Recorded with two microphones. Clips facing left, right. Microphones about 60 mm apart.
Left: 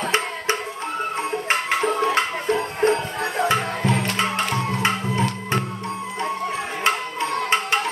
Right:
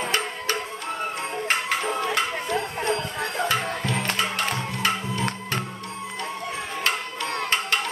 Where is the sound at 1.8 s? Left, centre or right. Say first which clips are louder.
Left 5 dB; left.